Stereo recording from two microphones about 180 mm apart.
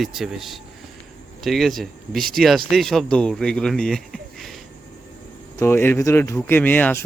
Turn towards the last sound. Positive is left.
turn(degrees=10)  # may be behind; listen again after turning